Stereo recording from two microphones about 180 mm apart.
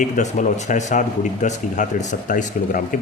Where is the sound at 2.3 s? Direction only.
45° left (ahead or behind).